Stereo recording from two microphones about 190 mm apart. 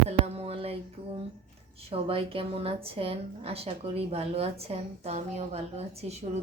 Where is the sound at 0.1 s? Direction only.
30° right (ahead or behind).